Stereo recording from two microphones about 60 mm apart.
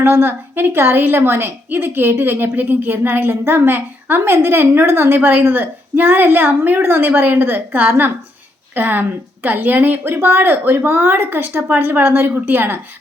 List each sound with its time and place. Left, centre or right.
0.0 s a woman's voice: right